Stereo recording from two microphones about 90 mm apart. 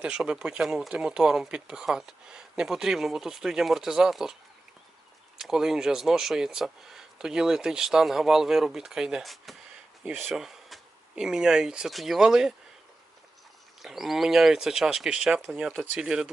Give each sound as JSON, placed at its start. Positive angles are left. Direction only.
{"t": 0.0, "sound": "speech", "side_deg": -10}
{"t": 5.4, "sound": "speech", "side_deg": -5}
{"t": 10.0, "sound": "speech", "side_deg": -15}
{"t": 10.3, "sound": "speech", "side_deg": -5}
{"t": 13.8, "sound": "speech", "side_deg": 0}